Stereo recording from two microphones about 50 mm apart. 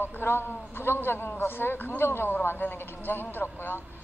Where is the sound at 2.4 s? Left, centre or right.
Left.